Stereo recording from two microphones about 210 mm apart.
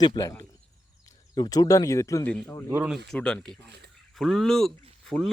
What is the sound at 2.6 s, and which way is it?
Speech, 5° right (ahead or behind).